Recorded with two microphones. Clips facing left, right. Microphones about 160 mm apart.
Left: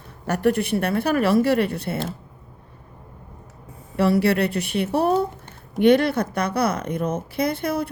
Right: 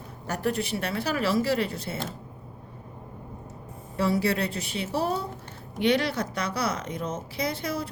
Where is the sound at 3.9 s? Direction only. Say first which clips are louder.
Left 6 dB; 65° left (ahead or behind).